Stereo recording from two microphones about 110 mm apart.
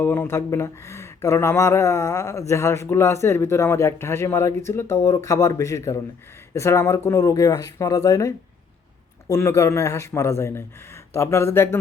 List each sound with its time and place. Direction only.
0.0 s speech: 20° left (ahead or behind)
9.3 s speech: 25° left (ahead or behind)